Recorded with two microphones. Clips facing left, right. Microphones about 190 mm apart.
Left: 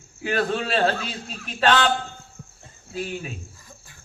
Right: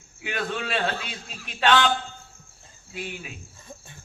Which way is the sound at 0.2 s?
40° left (ahead or behind).